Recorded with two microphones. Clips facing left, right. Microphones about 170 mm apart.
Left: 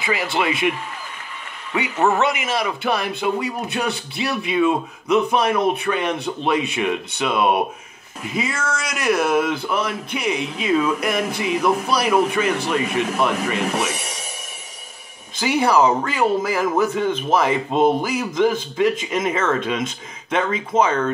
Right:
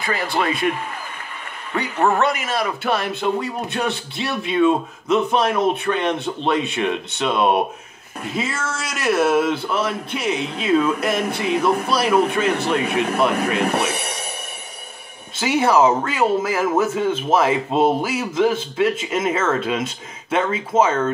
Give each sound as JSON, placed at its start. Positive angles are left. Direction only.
{"t": 0.0, "sound": "speech", "side_deg": 5}
{"t": 1.8, "sound": "speech", "side_deg": 5}
{"t": 13.6, "sound": "rub", "side_deg": -60}
{"t": 15.3, "sound": "speech", "side_deg": -5}